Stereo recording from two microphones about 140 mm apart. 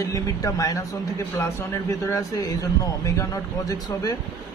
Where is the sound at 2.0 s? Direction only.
25° left (ahead or behind).